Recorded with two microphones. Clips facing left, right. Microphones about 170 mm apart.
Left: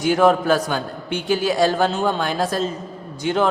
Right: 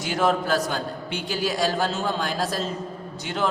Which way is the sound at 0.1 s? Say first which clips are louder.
Left 6 dB; 55° left (ahead or behind).